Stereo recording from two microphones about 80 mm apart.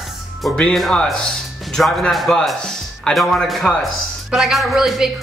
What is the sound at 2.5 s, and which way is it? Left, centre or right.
Music, centre.